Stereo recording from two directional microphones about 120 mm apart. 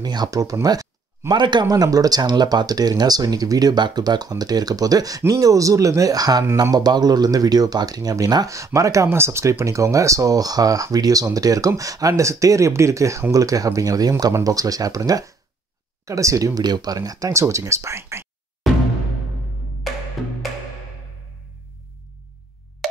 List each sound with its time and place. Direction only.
0.0 s speech: 35° right (ahead or behind)
18.6 s music: centre (ahead or behind)